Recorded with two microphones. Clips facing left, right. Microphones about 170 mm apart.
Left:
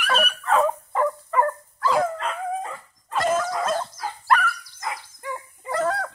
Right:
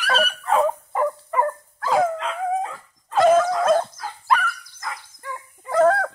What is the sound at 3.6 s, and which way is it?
Dog, 60° right (ahead or behind).